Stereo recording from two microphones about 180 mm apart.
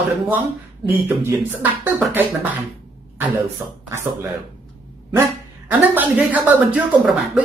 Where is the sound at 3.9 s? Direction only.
15° right (ahead or behind).